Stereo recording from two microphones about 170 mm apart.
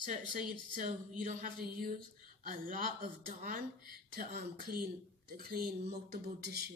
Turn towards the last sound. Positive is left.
turn(degrees=-70)  # may be behind; listen again after turning